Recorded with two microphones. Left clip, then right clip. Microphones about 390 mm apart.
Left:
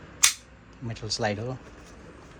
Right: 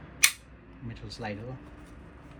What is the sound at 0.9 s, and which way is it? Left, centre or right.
Speech, centre.